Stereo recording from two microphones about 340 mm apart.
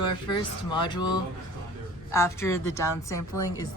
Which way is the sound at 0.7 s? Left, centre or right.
Centre.